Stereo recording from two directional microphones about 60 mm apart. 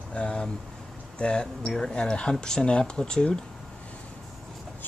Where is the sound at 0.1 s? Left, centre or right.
Centre.